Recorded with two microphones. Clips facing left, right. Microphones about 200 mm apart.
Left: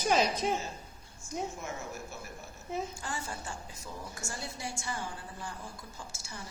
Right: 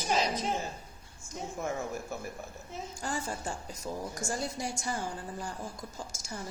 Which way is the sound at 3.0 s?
40° right (ahead or behind).